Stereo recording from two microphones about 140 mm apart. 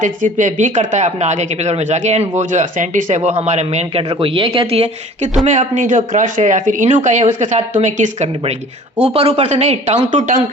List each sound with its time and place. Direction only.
0.0 s speech: 65° right (ahead or behind)
4.1 s speech: 40° right (ahead or behind); by 8.5 s 55° right (ahead or behind)
9.0 s speech: 45° right (ahead or behind)